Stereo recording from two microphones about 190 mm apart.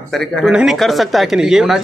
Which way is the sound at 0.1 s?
Centre (ahead or behind).